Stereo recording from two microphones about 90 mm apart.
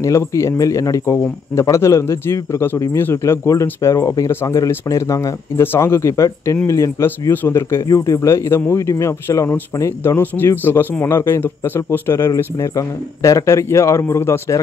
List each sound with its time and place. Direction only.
0.0 s a man's voice: 35° left (ahead or behind)
12.6 s a man's voice: 40° left (ahead or behind)